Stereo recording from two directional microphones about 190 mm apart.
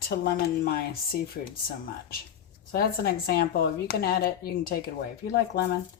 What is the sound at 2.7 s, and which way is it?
Speech, 55° left (ahead or behind).